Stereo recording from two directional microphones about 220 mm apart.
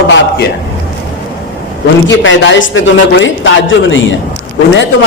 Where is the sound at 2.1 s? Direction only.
55° left (ahead or behind).